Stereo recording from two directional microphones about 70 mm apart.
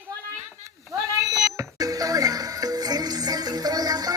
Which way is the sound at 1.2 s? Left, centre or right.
Right.